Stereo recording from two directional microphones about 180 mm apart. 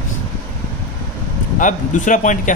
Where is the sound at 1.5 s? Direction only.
45° left (ahead or behind).